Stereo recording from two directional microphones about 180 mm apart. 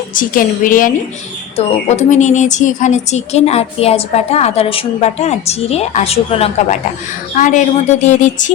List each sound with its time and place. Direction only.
0.1 s a woman's voice: 50° left (ahead or behind)